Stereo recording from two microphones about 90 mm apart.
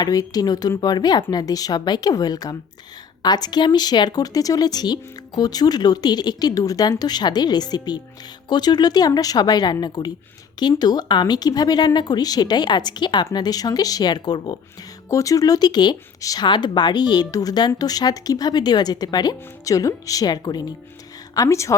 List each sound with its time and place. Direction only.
0.0 s speech: 45° left (ahead or behind)
15.1 s speech: 40° left (ahead or behind)
21.3 s speech: 35° left (ahead or behind)